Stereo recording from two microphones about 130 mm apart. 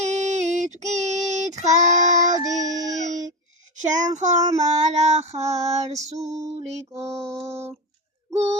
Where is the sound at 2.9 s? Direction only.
70° right (ahead or behind).